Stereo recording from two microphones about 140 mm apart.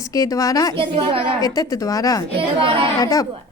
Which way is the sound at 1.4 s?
25° left (ahead or behind).